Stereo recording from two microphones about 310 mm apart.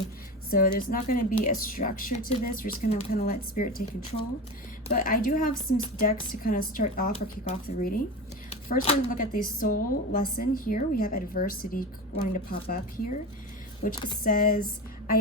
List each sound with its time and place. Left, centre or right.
0.5 s a woman's voice: left
4.9 s a woman's voice: left